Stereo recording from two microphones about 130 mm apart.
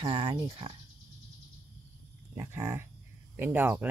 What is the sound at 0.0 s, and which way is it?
Speech, 40° right (ahead or behind).